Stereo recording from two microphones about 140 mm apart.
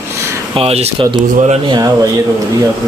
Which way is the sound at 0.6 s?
45° right (ahead or behind).